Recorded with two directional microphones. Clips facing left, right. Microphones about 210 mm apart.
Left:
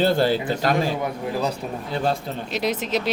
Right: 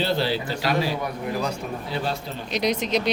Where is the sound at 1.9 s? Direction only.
45° left (ahead or behind).